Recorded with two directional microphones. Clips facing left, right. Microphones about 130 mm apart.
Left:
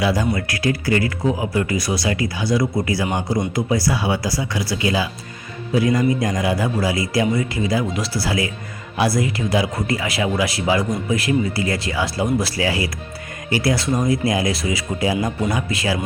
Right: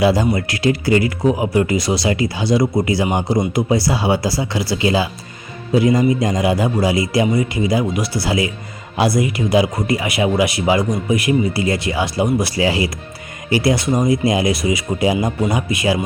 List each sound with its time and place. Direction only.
0.0 s speech: 30° right (ahead or behind)